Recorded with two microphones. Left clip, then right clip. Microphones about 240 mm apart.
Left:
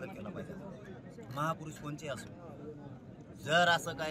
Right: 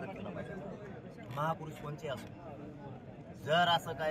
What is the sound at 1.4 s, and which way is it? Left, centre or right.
Speech, left.